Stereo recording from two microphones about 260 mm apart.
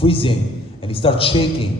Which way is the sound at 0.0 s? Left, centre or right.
Left.